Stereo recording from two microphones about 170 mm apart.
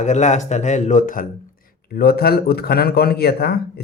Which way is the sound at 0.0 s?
45° left (ahead or behind).